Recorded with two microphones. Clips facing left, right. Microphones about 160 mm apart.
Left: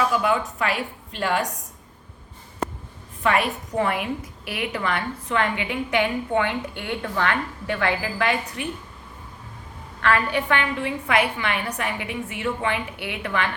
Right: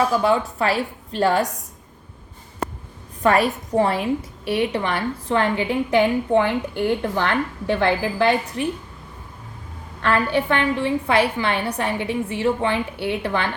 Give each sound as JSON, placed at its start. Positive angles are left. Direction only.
{"t": 0.1, "sound": "a woman's voice", "side_deg": -35}
{"t": 3.2, "sound": "a woman's voice", "side_deg": -40}
{"t": 10.0, "sound": "a woman's voice", "side_deg": -30}